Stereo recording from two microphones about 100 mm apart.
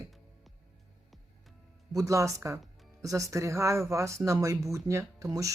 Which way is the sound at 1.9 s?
35° right (ahead or behind).